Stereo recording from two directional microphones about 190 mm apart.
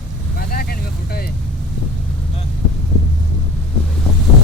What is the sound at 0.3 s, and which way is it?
Vehicle, 55° left (ahead or behind).